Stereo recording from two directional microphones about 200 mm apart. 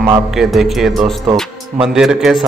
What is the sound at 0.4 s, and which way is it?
Music, centre (ahead or behind).